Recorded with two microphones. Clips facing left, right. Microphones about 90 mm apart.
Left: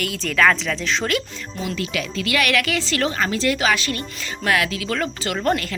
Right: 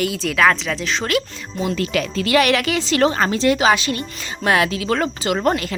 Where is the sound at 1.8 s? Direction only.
40° right (ahead or behind); by 3.1 s 20° right (ahead or behind).